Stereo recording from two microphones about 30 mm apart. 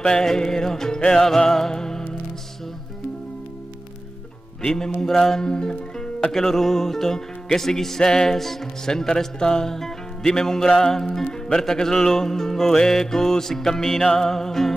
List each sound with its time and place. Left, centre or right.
0.1 s music: centre
4.6 s music: left
5.4 s music: left
6.3 s music: centre